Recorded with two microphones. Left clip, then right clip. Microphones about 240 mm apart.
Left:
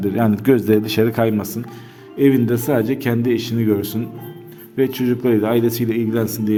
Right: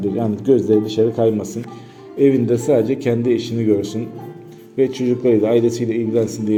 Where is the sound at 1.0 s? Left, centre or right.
Left.